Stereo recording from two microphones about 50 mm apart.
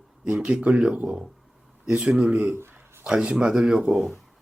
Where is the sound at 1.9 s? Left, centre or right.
Centre.